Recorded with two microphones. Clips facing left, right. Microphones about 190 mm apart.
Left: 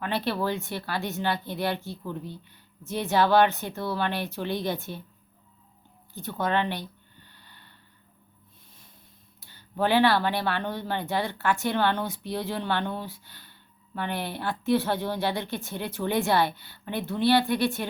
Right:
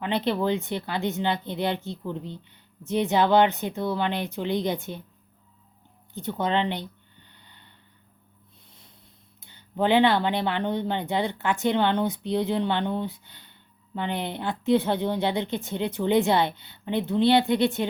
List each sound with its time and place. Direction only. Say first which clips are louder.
0.0 s speech: right 3 dB; 20° right (ahead or behind)
6.1 s speech: right 2 dB; 20° right (ahead or behind)
7.3 s a sound: even; 20° right (ahead or behind)
9.4 s speech: right 2 dB; 20° right (ahead or behind)